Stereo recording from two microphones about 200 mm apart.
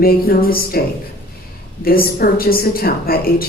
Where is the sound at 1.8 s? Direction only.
45° left (ahead or behind).